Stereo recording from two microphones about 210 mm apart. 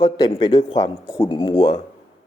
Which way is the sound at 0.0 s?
20° left (ahead or behind).